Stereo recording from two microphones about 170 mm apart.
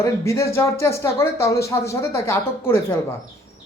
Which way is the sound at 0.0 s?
15° left (ahead or behind).